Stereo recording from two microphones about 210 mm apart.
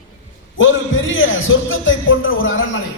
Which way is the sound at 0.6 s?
65° left (ahead or behind).